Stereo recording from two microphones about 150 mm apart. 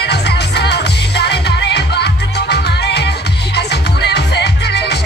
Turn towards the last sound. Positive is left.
turn(degrees=90)